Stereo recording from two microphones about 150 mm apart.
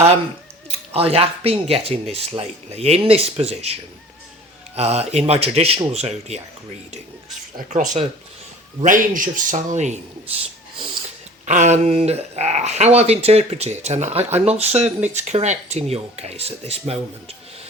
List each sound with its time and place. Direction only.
0.9 s speech: 40° right (ahead or behind)
7.7 s speech: 50° right (ahead or behind)
8.8 s a man's voice: 65° right (ahead or behind)
11.4 s speech: 50° right (ahead or behind)